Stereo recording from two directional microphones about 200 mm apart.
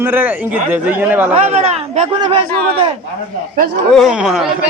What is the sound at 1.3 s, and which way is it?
Speech, 30° right (ahead or behind).